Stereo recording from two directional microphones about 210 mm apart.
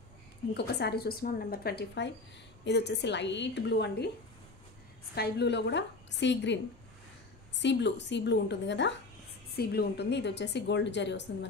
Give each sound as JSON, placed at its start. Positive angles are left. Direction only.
{"t": 0.6, "sound": "a woman's voice", "side_deg": 50}
{"t": 5.1, "sound": "a woman's voice", "side_deg": 50}